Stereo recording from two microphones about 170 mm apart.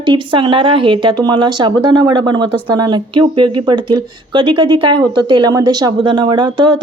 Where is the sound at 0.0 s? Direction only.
30° right (ahead or behind).